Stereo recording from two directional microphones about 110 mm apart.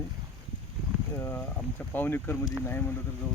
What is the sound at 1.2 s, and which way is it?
Speech, 20° left (ahead or behind).